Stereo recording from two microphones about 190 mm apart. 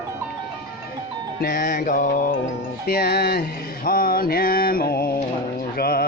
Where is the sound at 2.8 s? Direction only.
55° left (ahead or behind).